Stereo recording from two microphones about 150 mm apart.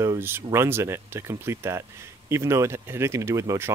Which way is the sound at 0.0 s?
15° right (ahead or behind).